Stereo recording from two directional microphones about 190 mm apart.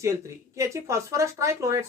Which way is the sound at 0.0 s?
15° right (ahead or behind).